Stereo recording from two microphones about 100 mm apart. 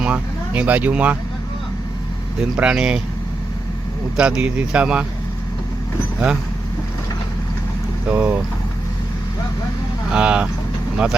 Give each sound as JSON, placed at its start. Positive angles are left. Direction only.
{"t": 0.0, "sound": "speech", "side_deg": -15}
{"t": 2.4, "sound": "speech", "side_deg": -5}
{"t": 4.2, "sound": "speech", "side_deg": -10}
{"t": 8.0, "sound": "speech", "side_deg": -15}
{"t": 10.1, "sound": "speech", "side_deg": -10}